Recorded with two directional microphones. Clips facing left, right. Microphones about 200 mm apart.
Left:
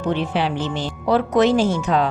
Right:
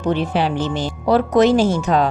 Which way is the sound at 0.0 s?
40° right (ahead or behind).